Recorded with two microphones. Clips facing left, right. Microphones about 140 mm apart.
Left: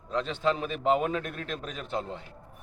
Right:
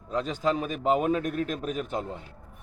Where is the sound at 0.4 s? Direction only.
5° right (ahead or behind).